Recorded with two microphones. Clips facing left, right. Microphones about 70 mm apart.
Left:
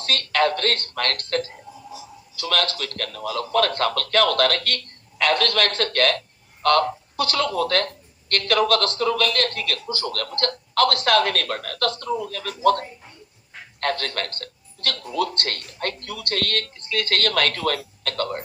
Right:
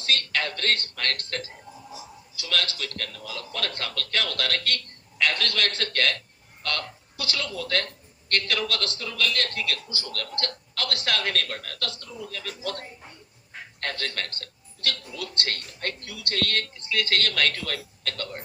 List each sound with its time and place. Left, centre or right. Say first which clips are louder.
0.0 s a man's voice: left 7 dB; left